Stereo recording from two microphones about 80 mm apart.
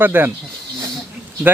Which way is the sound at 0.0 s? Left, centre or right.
Right.